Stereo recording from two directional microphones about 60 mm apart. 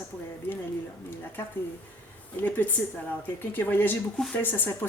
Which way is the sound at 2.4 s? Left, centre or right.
Left.